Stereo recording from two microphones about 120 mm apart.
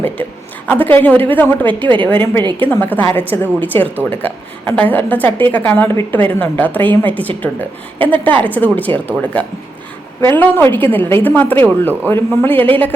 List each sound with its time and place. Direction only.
0.7 s a woman's voice: 15° left (ahead or behind)
2.4 s a woman's voice: 40° right (ahead or behind)
2.6 s a woman's voice: 15° left (ahead or behind)